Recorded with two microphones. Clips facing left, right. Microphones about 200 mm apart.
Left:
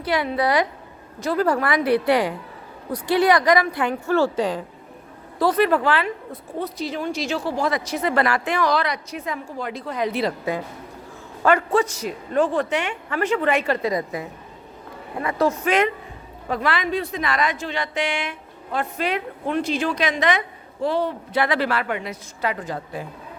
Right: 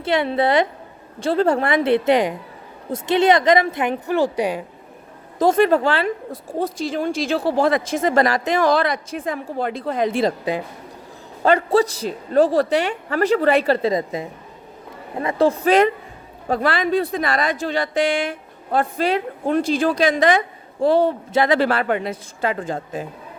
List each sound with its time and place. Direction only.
0.0 s a woman's voice: 25° right (ahead or behind)
5.4 s speech: 45° right (ahead or behind)
5.8 s a woman's voice: 30° right (ahead or behind)
6.6 s speech: 50° right (ahead or behind)
7.3 s speech: 60° right (ahead or behind)
11.4 s a woman's voice: 35° right (ahead or behind)